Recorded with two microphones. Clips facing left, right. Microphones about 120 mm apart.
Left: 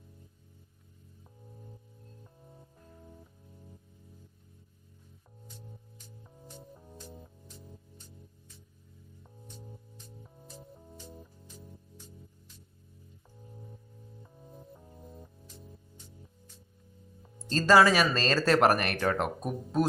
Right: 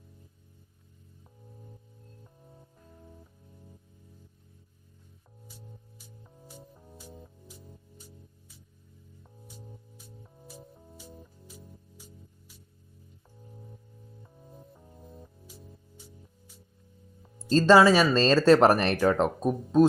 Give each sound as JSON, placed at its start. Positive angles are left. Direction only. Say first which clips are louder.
{"t": 2.2, "sound": "music", "louder": "even", "side_deg": 0}
{"t": 5.5, "sound": "music", "louder": "even", "side_deg": -5}
{"t": 17.7, "sound": "speech", "louder": "right 3 dB", "side_deg": -30}